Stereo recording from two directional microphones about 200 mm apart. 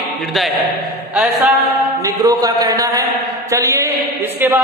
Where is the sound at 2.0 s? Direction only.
20° right (ahead or behind).